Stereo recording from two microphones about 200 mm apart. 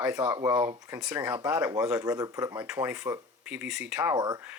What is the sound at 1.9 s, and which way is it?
Speech, 15° right (ahead or behind).